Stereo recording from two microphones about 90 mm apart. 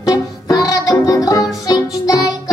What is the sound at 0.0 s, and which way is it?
Music, 45° left (ahead or behind).